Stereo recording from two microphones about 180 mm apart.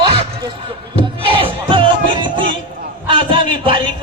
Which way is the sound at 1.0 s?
30° right (ahead or behind).